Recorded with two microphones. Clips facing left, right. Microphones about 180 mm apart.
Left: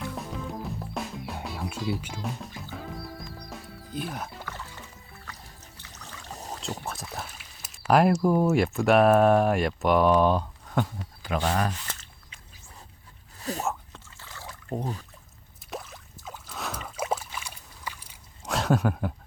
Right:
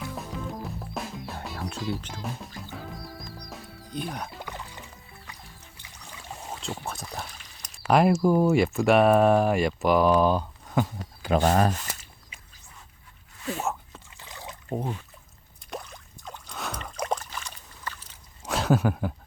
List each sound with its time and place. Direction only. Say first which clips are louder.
0.0 s music: even; centre (ahead or behind)
3.2 s music: even; 40° right (ahead or behind)
3.5 s music: even; 5° left (ahead or behind)
4.4 s music: right 1 dB; 15° right (ahead or behind)
6.5 s a sound: even; centre (ahead or behind)
7.9 s speech: even; centre (ahead or behind)
11.3 s speech: right 5 dB; 45° right (ahead or behind)
11.9 s a sound: right 1 dB; 10° right (ahead or behind)
13.4 s speech: even; 40° left (ahead or behind)
14.2 s trickle: right 2 dB; 15° right (ahead or behind)
15.7 s a sound: even; centre (ahead or behind)
18.4 s a sound: right 1 dB; centre (ahead or behind)